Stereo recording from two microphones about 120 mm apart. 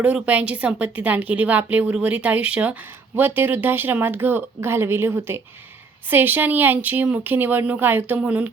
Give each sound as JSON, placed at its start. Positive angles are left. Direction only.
{"t": 0.0, "sound": "a woman's voice", "side_deg": -10}